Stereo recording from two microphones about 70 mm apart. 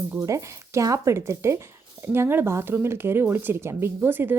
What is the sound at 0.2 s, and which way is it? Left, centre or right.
A woman's voice, right.